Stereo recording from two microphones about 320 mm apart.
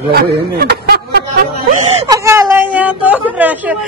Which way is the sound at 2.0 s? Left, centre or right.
Centre.